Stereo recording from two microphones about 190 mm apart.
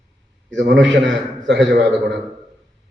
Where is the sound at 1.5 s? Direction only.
Centre (ahead or behind).